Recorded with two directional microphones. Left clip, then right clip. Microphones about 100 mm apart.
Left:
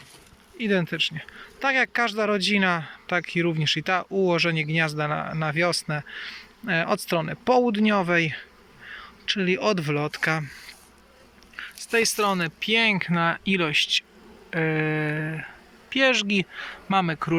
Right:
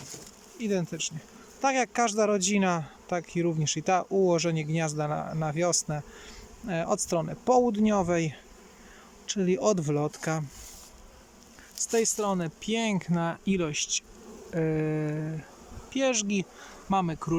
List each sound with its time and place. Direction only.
0.6 s speech: 20° right (ahead or behind)
11.9 s speech: 35° right (ahead or behind)